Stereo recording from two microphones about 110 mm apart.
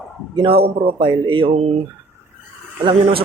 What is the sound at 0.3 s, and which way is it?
A man's voice, 60° right (ahead or behind).